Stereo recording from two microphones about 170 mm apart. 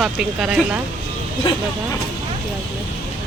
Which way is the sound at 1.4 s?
30° left (ahead or behind).